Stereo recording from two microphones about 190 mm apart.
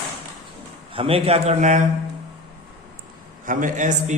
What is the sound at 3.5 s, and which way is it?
Speech, 45° right (ahead or behind).